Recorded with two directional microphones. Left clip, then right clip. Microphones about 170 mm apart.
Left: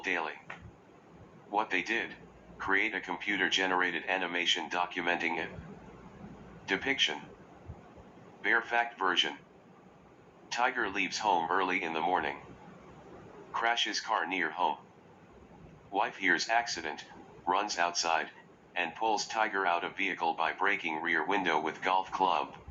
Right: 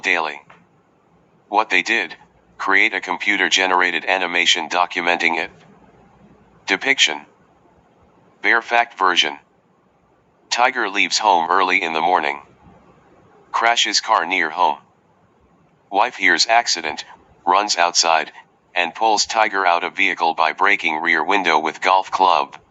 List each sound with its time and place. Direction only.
0.0 s speech: 45° right (ahead or behind)
6.7 s speech: 45° right (ahead or behind)
8.4 s speech: 45° right (ahead or behind)
10.5 s speech: 45° right (ahead or behind)
13.5 s speech: 45° right (ahead or behind)
15.9 s speech: 45° right (ahead or behind)